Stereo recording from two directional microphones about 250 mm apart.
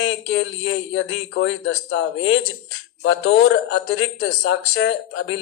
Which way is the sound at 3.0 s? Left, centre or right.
Left.